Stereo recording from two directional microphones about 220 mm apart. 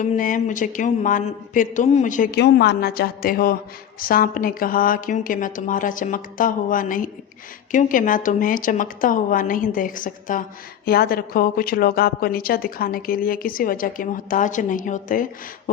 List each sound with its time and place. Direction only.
0.0 s a woman's voice: 35° left (ahead or behind)